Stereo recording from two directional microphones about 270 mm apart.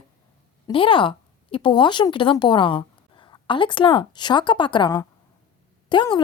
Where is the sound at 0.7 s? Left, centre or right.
Centre.